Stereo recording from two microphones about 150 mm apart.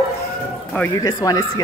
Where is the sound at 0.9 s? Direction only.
25° left (ahead or behind).